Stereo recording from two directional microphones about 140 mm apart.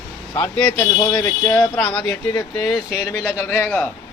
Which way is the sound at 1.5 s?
5° left (ahead or behind).